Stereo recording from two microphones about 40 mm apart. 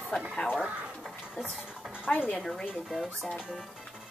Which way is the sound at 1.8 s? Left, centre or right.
Right.